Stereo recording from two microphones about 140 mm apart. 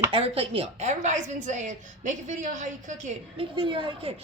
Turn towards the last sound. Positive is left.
turn(degrees=-35)  # may be behind; listen again after turning